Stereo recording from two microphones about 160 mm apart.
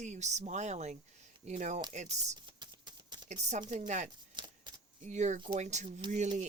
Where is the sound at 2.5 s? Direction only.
30° right (ahead or behind).